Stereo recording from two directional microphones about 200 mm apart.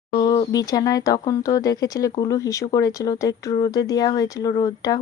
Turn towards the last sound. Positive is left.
turn(degrees=20)  # may be behind; listen again after turning